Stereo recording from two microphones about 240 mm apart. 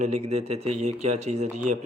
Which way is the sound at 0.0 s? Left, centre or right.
Right.